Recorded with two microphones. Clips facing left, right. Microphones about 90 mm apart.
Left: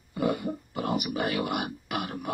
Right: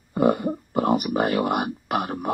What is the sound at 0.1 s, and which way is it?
Speech, 45° right (ahead or behind).